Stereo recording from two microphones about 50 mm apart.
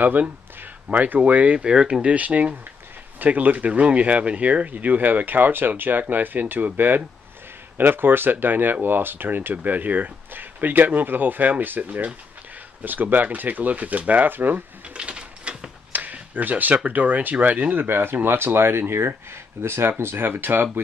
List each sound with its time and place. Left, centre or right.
0.0 s speech: right
15.0 s a sound: right
15.9 s speech: right
17.8 s speech: right